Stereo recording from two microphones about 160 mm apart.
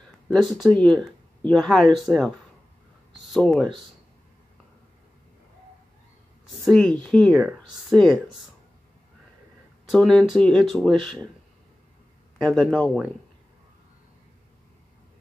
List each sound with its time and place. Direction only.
0.3 s speech: centre (ahead or behind)
6.6 s speech: 5° left (ahead or behind)
9.8 s speech: 5° left (ahead or behind)
12.4 s speech: 5° left (ahead or behind)